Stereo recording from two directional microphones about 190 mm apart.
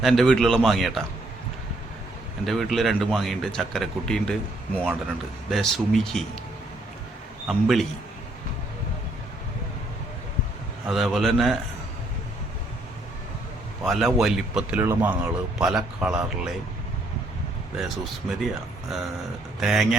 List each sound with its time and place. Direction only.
0.0 s speech: centre (ahead or behind)
2.5 s speech: centre (ahead or behind)
7.4 s speech: centre (ahead or behind)
10.8 s speech: centre (ahead or behind)
13.8 s speech: centre (ahead or behind)
17.7 s speech: centre (ahead or behind)
19.5 s speech: centre (ahead or behind)